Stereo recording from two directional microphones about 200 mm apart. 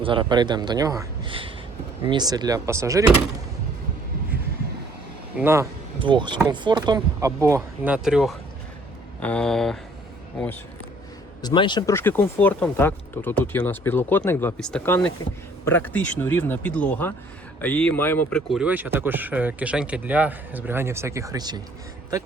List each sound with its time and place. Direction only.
0.0 s a man's voice: 25° right (ahead or behind)
5.4 s speech: 10° right (ahead or behind)
6.0 s a man's voice: 25° right (ahead or behind); by 9.7 s centre (ahead or behind)
11.4 s speech: 25° left (ahead or behind); by 18.6 s 5° left (ahead or behind)
18.6 s speech: 10° right (ahead or behind)